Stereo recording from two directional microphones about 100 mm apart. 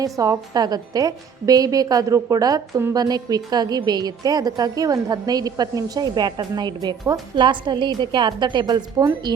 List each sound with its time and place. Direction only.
0.0 s a woman's voice: 35° right (ahead or behind)